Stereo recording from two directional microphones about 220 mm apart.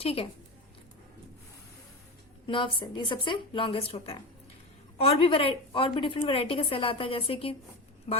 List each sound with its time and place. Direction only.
0.0 s a woman's voice: 25° left (ahead or behind)
2.5 s a woman's voice: 20° left (ahead or behind)